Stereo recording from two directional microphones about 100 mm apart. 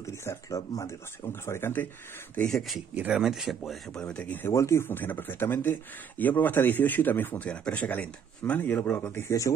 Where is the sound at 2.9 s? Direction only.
15° right (ahead or behind); by 4.5 s 15° left (ahead or behind).